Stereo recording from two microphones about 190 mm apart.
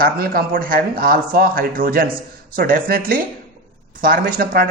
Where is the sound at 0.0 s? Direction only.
50° right (ahead or behind).